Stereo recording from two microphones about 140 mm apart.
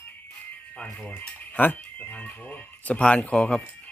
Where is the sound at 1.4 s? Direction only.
10° left (ahead or behind).